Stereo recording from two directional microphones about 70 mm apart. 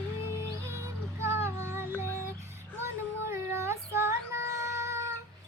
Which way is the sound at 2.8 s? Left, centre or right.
Right.